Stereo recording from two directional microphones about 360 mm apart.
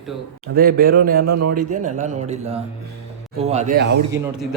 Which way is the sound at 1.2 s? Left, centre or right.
Right.